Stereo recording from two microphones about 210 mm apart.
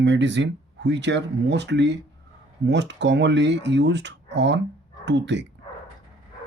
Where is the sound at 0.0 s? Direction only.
55° right (ahead or behind).